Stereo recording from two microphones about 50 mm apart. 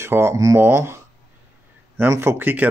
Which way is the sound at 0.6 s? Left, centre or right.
Right.